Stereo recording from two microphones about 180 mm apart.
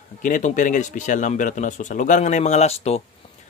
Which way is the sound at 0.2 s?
45° left (ahead or behind).